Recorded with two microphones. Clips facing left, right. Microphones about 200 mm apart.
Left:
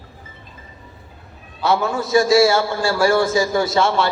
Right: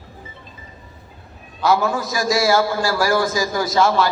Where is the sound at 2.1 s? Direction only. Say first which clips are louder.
Left 6 dB; 25° left (ahead or behind).